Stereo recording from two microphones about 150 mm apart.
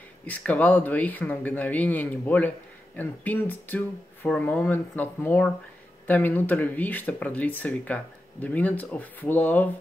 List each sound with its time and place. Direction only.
0.3 s speech: 10° left (ahead or behind)